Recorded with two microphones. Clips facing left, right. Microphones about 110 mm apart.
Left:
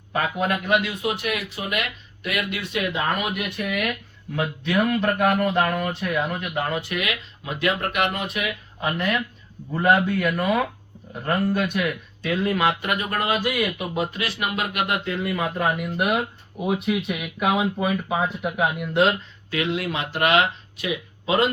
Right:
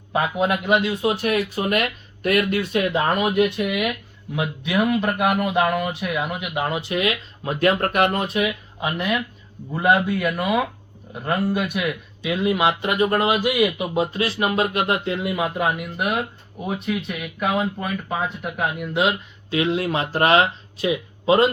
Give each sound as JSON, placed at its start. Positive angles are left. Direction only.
{"t": 0.1, "sound": "a man's voice", "side_deg": -20}
{"t": 3.2, "sound": "speech", "side_deg": -25}
{"t": 3.7, "sound": "speech", "side_deg": -15}
{"t": 7.4, "sound": "a man's voice", "side_deg": -40}
{"t": 8.8, "sound": "speech", "side_deg": -10}
{"t": 13.3, "sound": "speech", "side_deg": -15}
{"t": 13.9, "sound": "speech", "side_deg": -30}
{"t": 19.5, "sound": "speech", "side_deg": -25}